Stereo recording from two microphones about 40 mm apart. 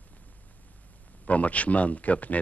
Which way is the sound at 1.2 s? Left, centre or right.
Left.